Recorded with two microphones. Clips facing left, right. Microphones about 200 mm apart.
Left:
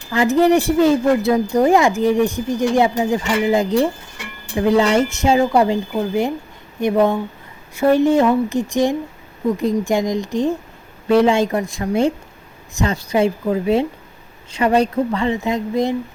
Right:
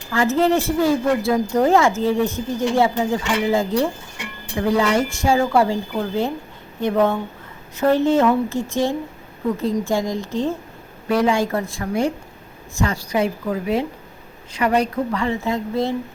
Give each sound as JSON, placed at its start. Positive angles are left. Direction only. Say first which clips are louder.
{"t": 0.1, "sound": "a woman's voice", "louder": "left 4 dB", "side_deg": 15}
{"t": 11.1, "sound": "a woman's voice", "louder": "left 4 dB", "side_deg": 25}